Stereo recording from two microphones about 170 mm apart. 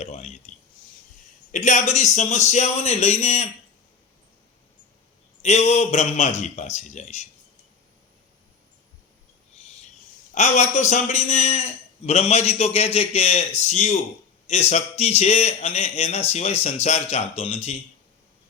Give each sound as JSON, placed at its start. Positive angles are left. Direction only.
{"t": 0.0, "sound": "speech", "side_deg": 40}
{"t": 1.5, "sound": "speech", "side_deg": 45}
{"t": 5.4, "sound": "speech", "side_deg": 40}
{"t": 10.3, "sound": "a man's voice", "side_deg": 45}